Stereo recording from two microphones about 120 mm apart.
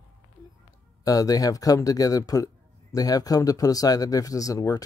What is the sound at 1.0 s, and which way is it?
Speech, 30° left (ahead or behind).